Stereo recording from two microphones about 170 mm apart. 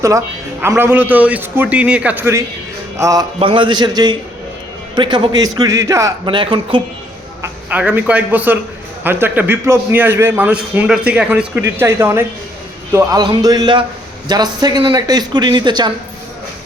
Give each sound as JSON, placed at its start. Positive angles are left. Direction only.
{"t": 0.6, "sound": "a man's voice", "side_deg": -15}
{"t": 3.0, "sound": "a man's voice", "side_deg": -20}
{"t": 7.4, "sound": "a man's voice", "side_deg": -10}